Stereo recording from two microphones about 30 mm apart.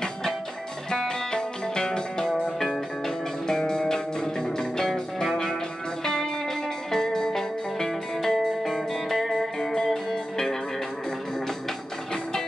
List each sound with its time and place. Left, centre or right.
0.8 s music: left
3.4 s music: centre
12.1 s music: centre